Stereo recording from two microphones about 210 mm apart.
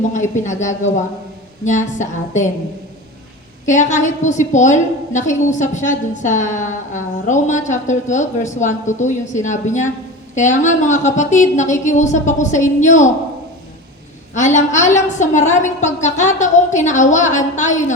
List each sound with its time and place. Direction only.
0.1 s a woman's voice: 35° left (ahead or behind)
3.7 s a woman's voice: 35° left (ahead or behind)
14.3 s a woman's voice: 35° left (ahead or behind)